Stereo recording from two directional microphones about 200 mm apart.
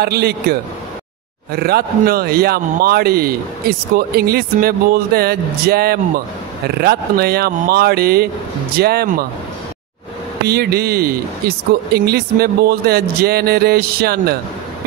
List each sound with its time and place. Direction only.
0.0 s speech: 55° right (ahead or behind)
10.4 s speech: 50° right (ahead or behind)